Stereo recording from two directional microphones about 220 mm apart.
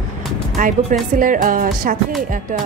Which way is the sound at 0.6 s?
35° right (ahead or behind).